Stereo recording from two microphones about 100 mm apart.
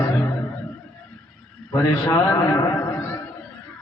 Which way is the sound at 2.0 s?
30° left (ahead or behind).